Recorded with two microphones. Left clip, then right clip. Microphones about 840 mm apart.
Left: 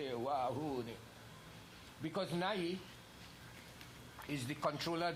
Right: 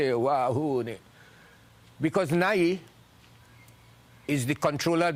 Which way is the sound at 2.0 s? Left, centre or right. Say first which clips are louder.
Right 14 dB; right.